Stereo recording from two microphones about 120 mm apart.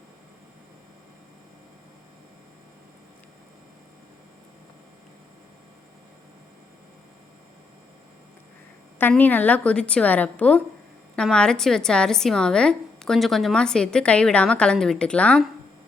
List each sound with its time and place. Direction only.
9.0 s a woman's voice: 15° left (ahead or behind)